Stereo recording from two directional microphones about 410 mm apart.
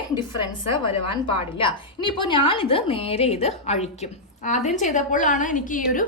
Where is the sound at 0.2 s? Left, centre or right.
Centre.